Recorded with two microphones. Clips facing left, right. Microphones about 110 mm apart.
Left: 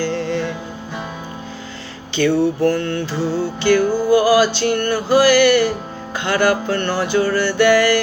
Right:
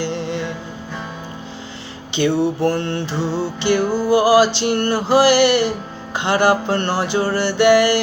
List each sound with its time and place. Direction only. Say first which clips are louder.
0.0 s music: left 3 dB; 20° right (ahead or behind)
2.1 s music: left 1 dB; 25° right (ahead or behind)